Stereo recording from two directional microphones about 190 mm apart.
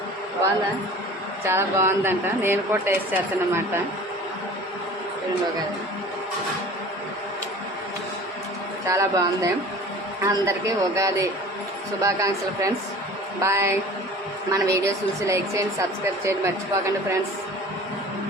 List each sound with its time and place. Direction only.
1.5 s speech: 15° right (ahead or behind)
8.9 s speech: 15° right (ahead or behind)